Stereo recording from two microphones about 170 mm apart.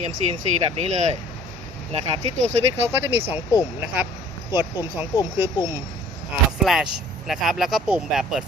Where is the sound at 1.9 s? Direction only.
40° right (ahead or behind).